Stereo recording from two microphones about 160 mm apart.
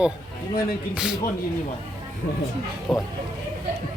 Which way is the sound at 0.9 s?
5° right (ahead or behind).